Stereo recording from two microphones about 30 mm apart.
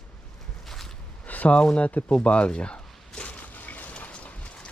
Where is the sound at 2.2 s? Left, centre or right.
Left.